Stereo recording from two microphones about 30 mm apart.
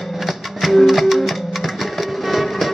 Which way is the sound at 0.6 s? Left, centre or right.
Centre.